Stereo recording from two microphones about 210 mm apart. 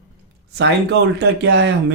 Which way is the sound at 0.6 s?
55° right (ahead or behind).